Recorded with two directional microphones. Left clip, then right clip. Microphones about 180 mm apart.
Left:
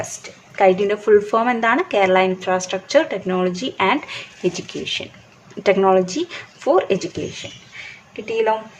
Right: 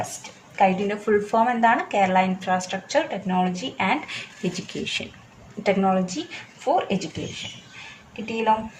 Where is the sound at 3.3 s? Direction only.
40° left (ahead or behind).